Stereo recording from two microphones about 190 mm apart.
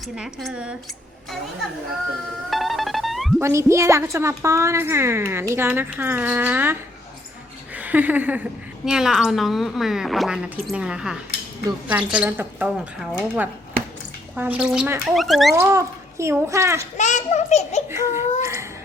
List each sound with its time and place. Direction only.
0.0 s a woman's voice: centre (ahead or behind)
2.5 s music: centre (ahead or behind)
3.4 s a woman's voice: 15° right (ahead or behind)
15.5 s a woman's voice: 15° right (ahead or behind)
17.0 s a child's voice: 40° left (ahead or behind)
17.8 s speech: 15° right (ahead or behind)
18.4 s a sound: 15° right (ahead or behind)